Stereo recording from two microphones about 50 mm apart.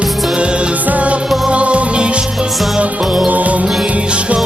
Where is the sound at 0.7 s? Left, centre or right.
Right.